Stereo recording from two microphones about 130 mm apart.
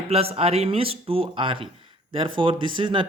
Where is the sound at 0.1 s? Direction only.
50° right (ahead or behind).